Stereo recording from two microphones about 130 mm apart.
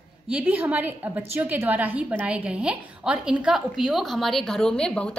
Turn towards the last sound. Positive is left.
turn(degrees=5)  # may be behind; listen again after turning